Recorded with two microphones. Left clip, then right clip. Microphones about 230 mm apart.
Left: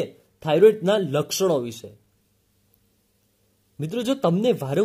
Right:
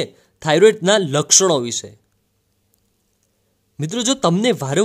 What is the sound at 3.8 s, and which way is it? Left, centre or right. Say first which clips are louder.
Speech: right 4 dB; right.